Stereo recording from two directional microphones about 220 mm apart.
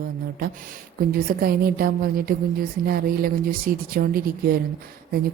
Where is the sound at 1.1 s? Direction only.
40° right (ahead or behind).